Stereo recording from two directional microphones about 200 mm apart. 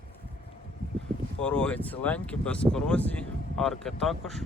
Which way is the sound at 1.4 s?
5° left (ahead or behind).